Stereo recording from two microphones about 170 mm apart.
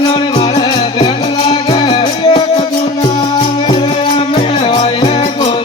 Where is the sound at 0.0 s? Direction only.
25° left (ahead or behind).